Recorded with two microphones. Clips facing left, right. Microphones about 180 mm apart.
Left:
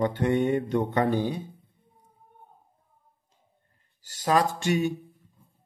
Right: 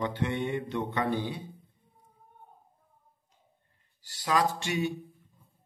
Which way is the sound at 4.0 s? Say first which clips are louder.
Left 4 dB; 45° left (ahead or behind).